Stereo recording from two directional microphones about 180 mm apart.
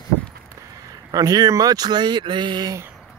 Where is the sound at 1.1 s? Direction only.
20° right (ahead or behind).